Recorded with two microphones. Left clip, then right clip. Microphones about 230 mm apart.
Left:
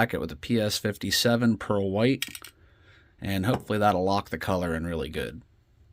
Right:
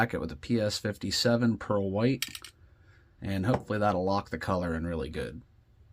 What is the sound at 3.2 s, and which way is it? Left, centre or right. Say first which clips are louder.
Speech: left 2 dB; left.